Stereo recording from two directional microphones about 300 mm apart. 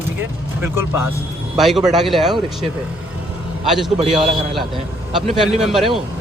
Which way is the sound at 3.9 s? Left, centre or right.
Right.